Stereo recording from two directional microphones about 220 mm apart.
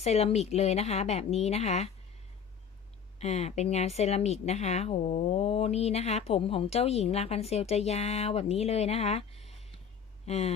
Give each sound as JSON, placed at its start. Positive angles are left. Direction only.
{"t": 0.0, "sound": "a woman's voice", "side_deg": 30}
{"t": 3.2, "sound": "a woman's voice", "side_deg": 30}
{"t": 9.5, "sound": "a sound", "side_deg": 25}
{"t": 10.2, "sound": "a woman's voice", "side_deg": 30}